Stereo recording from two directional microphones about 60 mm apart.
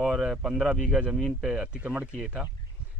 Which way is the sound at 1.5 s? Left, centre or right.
Centre.